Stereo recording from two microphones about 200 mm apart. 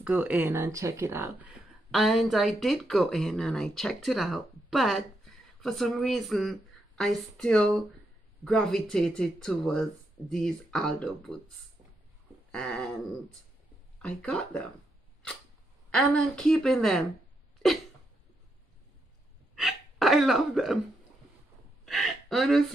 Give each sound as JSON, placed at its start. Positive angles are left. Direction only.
{"t": 0.0, "sound": "speech", "side_deg": -10}
{"t": 12.4, "sound": "a sound", "side_deg": 5}
{"t": 14.0, "sound": "speech", "side_deg": 5}
{"t": 15.9, "sound": "speech", "side_deg": 5}
{"t": 19.5, "sound": "hiccup", "side_deg": 0}
{"t": 21.8, "sound": "hiccup", "side_deg": 0}